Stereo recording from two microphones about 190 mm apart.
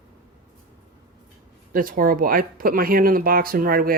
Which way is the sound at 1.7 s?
45° right (ahead or behind).